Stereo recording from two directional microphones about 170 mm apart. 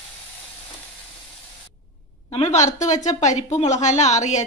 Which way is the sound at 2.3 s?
40° left (ahead or behind).